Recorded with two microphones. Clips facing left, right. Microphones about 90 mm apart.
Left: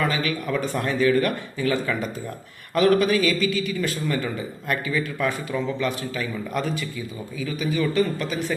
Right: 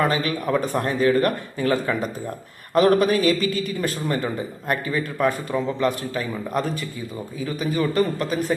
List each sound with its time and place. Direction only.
0.0 s a man's voice: 40° right (ahead or behind)